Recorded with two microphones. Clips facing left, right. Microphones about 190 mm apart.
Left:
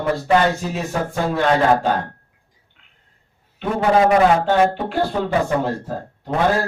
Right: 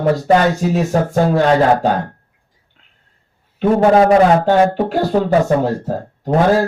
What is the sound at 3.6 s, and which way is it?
Speech, 40° right (ahead or behind).